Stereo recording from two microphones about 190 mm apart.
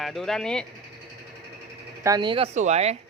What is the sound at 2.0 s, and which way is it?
Speech, 20° right (ahead or behind).